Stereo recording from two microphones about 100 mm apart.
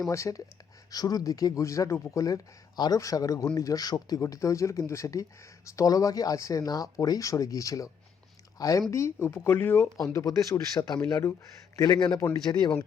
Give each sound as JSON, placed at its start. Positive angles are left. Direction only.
{"t": 0.1, "sound": "speech", "side_deg": 30}
{"t": 10.1, "sound": "speech", "side_deg": 30}
{"t": 11.0, "sound": "speech", "side_deg": 25}
{"t": 11.8, "sound": "a man's voice", "side_deg": 45}